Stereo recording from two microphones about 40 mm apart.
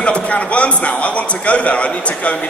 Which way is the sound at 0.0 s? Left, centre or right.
Left.